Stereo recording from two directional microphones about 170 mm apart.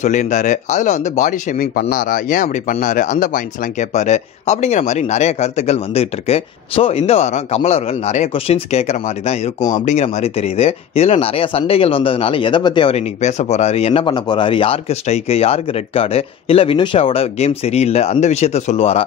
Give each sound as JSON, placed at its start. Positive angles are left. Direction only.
{"t": 0.0, "sound": "speech", "side_deg": 45}